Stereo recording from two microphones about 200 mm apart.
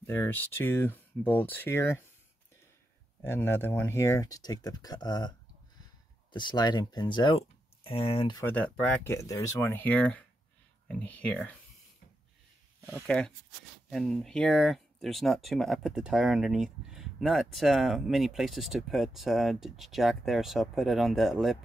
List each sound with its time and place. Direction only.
0.0 s speech: 10° left (ahead or behind)
3.2 s speech: 10° left (ahead or behind)
6.3 s speech: 20° left (ahead or behind)
8.4 s speech: 10° left (ahead or behind)
13.0 s speech: 5° left (ahead or behind)